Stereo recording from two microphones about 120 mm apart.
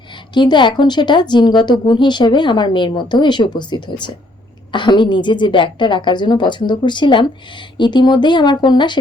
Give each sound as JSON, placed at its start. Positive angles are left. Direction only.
{"t": 0.3, "sound": "speech", "side_deg": 40}